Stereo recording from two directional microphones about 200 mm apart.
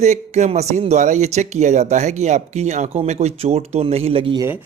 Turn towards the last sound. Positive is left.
turn(degrees=-25)  # may be behind; listen again after turning